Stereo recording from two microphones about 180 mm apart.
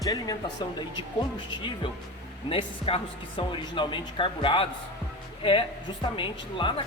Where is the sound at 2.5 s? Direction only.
30° left (ahead or behind).